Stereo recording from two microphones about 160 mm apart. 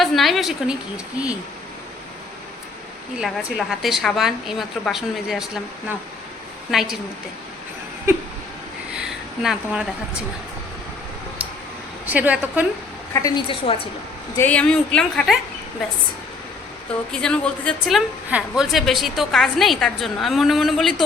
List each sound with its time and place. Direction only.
0.0 s a woman's voice: centre (ahead or behind)
3.2 s a woman's voice: centre (ahead or behind)
6.7 s a woman's voice: centre (ahead or behind)
9.0 s a sound: 5° right (ahead or behind)
12.0 s a woman's voice: 10° right (ahead or behind)
13.2 s a woman's voice: 30° left (ahead or behind)
14.3 s a woman's voice: 10° left (ahead or behind)
17.1 s a woman's voice: 5° left (ahead or behind)